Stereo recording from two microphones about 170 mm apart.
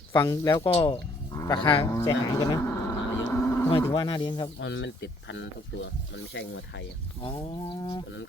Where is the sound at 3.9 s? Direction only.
25° left (ahead or behind).